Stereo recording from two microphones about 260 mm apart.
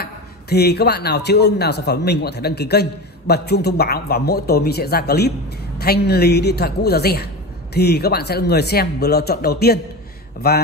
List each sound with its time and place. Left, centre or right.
0.0 s a man's voice: left